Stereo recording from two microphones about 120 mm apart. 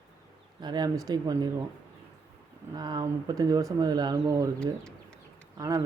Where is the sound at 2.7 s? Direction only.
35° right (ahead or behind).